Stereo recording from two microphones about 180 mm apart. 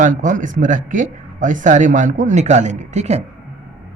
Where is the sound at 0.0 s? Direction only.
45° right (ahead or behind).